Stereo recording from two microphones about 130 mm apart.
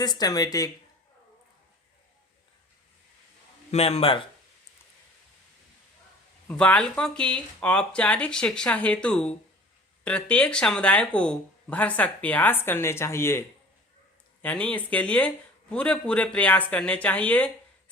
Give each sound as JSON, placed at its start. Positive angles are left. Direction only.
{"t": 0.0, "sound": "speech", "side_deg": 30}
{"t": 3.7, "sound": "speech", "side_deg": 50}
{"t": 6.5, "sound": "speech", "side_deg": 10}
{"t": 14.4, "sound": "speech", "side_deg": 10}